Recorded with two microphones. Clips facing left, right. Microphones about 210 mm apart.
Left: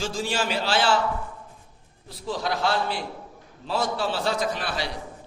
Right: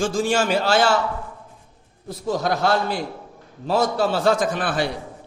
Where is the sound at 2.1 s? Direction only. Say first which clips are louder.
Right 6 dB; 45° right (ahead or behind).